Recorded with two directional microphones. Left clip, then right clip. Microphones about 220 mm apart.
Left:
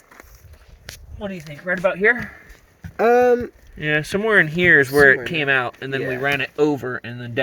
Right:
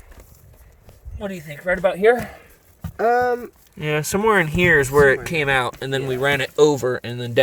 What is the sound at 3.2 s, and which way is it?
Speech, 25° left (ahead or behind).